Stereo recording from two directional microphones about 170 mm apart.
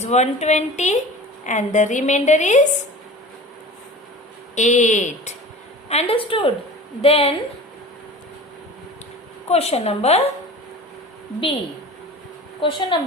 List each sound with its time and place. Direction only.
0.0 s a woman's voice: 40° left (ahead or behind)
4.5 s a woman's voice: 45° left (ahead or behind)
9.5 s a woman's voice: 40° left (ahead or behind)
12.5 s a woman's voice: 30° left (ahead or behind)